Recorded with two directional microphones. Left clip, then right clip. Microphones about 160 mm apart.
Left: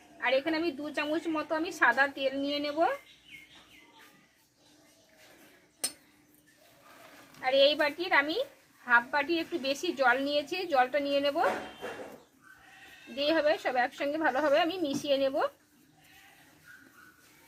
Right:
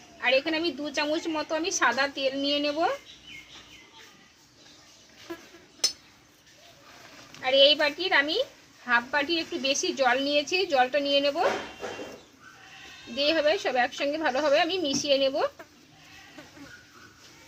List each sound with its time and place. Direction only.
0.2 s a woman's voice: 5° left (ahead or behind)
7.4 s a woman's voice: centre (ahead or behind)
13.1 s a woman's voice: centre (ahead or behind)